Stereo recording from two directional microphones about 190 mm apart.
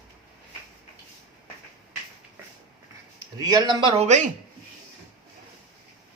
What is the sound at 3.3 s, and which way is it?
Speech, 20° right (ahead or behind).